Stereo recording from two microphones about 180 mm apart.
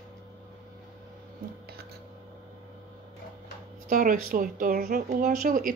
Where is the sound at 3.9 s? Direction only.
50° right (ahead or behind).